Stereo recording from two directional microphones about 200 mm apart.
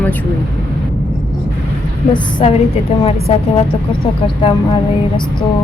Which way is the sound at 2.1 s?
20° left (ahead or behind).